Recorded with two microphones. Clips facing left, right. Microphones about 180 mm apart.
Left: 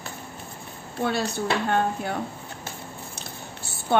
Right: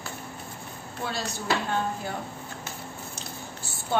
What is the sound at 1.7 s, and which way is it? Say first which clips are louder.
Speech: left 5 dB; 60° left (ahead or behind).